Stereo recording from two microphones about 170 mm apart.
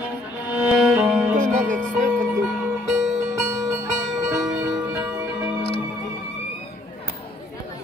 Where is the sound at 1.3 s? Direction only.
45° right (ahead or behind).